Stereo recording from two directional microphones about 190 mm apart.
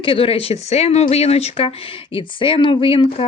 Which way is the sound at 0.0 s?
30° left (ahead or behind).